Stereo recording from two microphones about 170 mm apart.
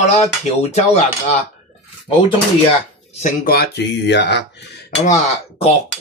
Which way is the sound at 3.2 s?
65° left (ahead or behind).